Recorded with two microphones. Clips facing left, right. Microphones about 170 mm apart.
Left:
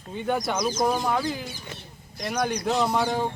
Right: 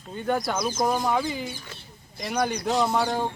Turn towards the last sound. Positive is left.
turn(degrees=0)  # may be behind; listen again after turning